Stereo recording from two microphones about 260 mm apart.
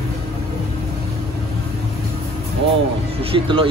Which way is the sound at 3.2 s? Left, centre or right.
Right.